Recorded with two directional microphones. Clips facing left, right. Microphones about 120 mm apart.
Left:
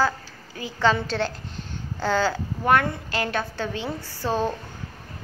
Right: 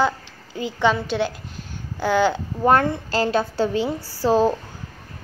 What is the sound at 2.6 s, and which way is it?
A woman's voice, 30° right (ahead or behind).